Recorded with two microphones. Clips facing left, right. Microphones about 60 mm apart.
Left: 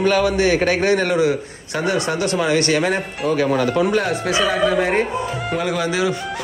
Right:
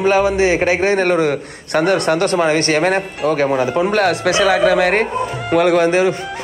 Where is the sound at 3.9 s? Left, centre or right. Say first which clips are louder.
Right 4 dB; right.